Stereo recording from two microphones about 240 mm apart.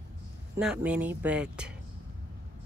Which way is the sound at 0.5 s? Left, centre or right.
Centre.